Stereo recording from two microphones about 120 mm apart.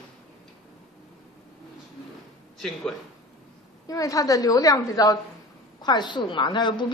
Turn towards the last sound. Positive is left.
turn(degrees=40)  # may be behind; listen again after turning